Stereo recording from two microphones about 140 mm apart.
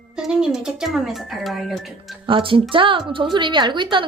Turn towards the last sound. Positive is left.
turn(degrees=-35)  # may be behind; listen again after turning